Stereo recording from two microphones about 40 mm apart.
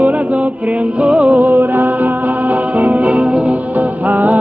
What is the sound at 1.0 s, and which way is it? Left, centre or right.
Music, right.